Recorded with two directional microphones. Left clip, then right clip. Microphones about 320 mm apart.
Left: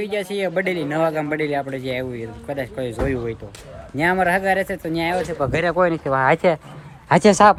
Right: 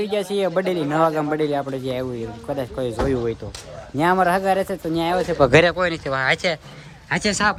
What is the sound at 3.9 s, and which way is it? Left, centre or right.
Speech, centre.